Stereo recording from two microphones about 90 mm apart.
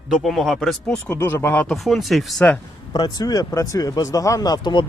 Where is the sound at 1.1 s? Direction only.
25° left (ahead or behind).